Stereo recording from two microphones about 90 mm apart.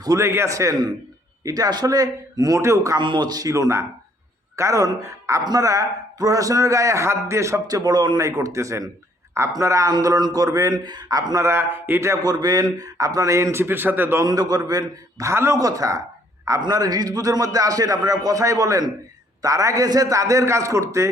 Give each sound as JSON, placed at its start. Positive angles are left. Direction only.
{"t": 0.2, "sound": "a man's voice", "side_deg": -30}
{"t": 3.0, "sound": "a man's voice", "side_deg": -60}
{"t": 10.8, "sound": "a man's voice", "side_deg": -50}
{"t": 11.4, "sound": "a man's voice", "side_deg": -25}
{"t": 14.3, "sound": "a man's voice", "side_deg": -45}
{"t": 15.3, "sound": "a man's voice", "side_deg": -30}